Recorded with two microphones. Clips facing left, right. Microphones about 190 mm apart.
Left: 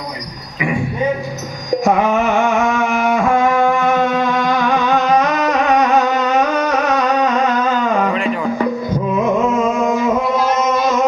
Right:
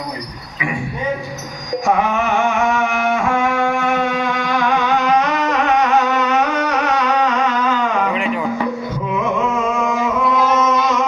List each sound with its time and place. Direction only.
1.8 s music: 40° left (ahead or behind)
8.1 s music: 15° right (ahead or behind)